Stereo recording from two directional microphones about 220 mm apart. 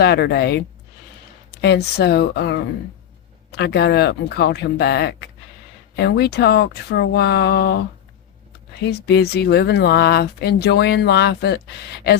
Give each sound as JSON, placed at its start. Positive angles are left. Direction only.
{"t": 0.0, "sound": "speech", "side_deg": 50}
{"t": 3.6, "sound": "speech", "side_deg": 50}
{"t": 8.9, "sound": "speech", "side_deg": 50}